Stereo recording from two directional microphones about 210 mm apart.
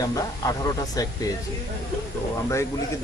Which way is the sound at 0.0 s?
15° left (ahead or behind).